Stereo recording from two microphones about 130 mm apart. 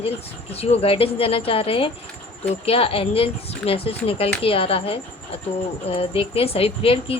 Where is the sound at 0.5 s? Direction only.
50° left (ahead or behind).